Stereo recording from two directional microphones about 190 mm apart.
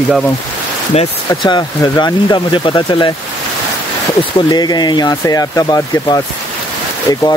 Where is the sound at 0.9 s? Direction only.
35° left (ahead or behind).